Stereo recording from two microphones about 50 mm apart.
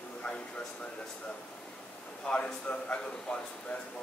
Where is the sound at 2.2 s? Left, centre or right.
Left.